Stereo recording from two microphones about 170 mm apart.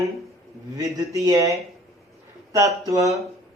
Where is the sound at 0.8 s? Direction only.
20° right (ahead or behind).